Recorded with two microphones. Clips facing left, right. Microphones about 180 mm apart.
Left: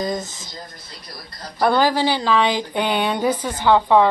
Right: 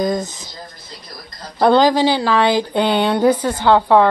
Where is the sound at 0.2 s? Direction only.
15° right (ahead or behind).